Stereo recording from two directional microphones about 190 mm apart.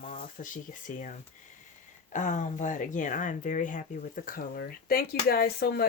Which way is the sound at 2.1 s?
40° left (ahead or behind).